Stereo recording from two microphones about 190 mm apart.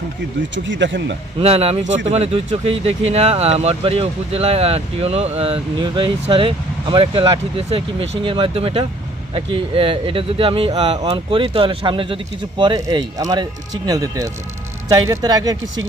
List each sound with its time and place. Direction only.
0.5 s speech: 75° right (ahead or behind)
1.4 s speech: 30° right (ahead or behind)